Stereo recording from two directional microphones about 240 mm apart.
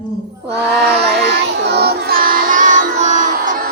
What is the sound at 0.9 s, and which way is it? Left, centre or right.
Child singing, right.